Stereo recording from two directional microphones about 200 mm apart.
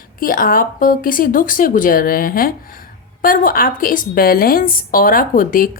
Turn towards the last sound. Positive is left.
turn(degrees=45)  # may be behind; listen again after turning